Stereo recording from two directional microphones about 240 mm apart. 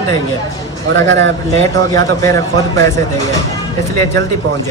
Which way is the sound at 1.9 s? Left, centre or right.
Centre.